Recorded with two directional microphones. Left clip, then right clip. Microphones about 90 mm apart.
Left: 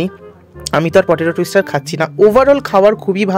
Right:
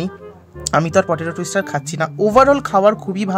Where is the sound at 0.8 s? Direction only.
60° left (ahead or behind).